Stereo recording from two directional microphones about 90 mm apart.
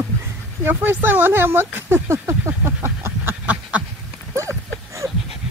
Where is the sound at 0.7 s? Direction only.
25° right (ahead or behind).